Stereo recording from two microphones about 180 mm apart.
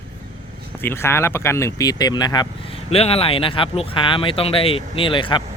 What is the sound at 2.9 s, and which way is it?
Speech, 35° left (ahead or behind).